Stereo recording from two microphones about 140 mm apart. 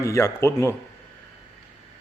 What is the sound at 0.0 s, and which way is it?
Speech, 20° left (ahead or behind).